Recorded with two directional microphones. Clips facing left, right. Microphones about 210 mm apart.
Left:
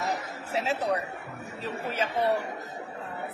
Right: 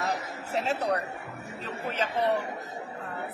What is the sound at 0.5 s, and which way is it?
Speech, 5° left (ahead or behind).